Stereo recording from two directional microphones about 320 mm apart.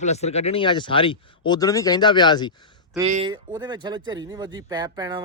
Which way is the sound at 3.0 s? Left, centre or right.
Centre.